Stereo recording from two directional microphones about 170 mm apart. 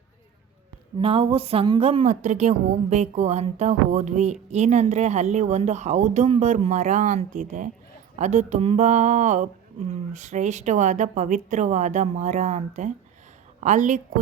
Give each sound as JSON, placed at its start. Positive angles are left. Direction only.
{"t": 0.9, "sound": "speech", "side_deg": -35}